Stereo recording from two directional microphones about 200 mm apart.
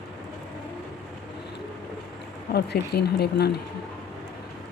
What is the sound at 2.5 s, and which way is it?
Speech, 55° left (ahead or behind).